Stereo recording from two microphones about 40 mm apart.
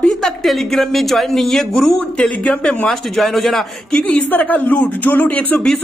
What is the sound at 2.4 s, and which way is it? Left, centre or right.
Speech, left.